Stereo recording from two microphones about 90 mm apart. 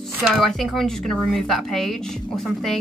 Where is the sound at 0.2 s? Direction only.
Centre (ahead or behind).